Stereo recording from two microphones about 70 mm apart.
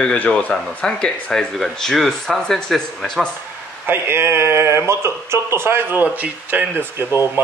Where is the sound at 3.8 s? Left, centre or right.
Right.